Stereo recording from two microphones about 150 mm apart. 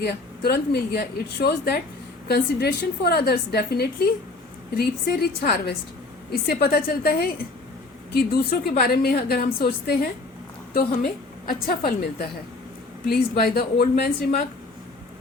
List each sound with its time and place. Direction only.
0.0 s a woman's voice: 90° left
11.0 s a woman's voice: 70° left (ahead or behind)
13.1 s a woman's voice: 90° left